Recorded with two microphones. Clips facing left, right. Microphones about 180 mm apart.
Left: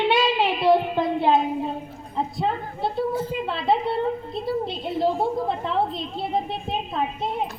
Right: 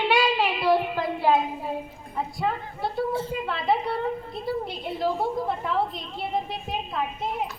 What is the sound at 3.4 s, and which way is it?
A woman's voice, 25° left (ahead or behind).